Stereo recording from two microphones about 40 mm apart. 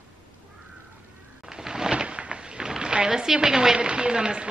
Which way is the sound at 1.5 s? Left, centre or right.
Centre.